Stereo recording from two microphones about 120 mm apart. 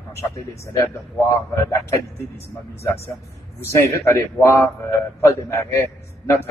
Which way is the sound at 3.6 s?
25° left (ahead or behind).